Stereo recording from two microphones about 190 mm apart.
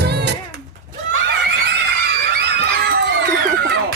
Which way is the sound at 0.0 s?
60° right (ahead or behind).